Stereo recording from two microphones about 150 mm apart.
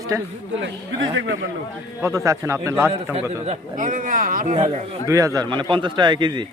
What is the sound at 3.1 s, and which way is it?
Speech, 55° right (ahead or behind).